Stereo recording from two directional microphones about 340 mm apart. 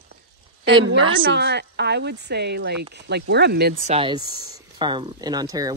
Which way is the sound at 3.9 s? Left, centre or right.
Centre.